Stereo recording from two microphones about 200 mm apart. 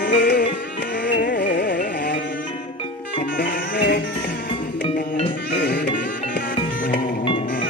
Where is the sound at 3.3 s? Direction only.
60° left (ahead or behind).